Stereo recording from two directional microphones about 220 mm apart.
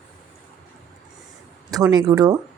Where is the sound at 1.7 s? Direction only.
20° right (ahead or behind).